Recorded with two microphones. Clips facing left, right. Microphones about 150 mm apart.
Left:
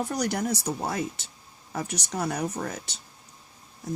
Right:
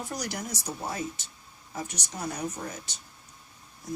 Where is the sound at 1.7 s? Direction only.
75° left (ahead or behind).